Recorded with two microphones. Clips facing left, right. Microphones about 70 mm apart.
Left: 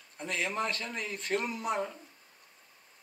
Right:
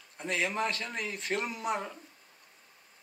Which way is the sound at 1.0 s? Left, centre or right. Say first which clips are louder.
Left 2 dB; left.